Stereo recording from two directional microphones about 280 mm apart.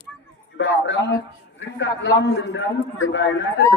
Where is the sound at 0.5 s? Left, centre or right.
Left.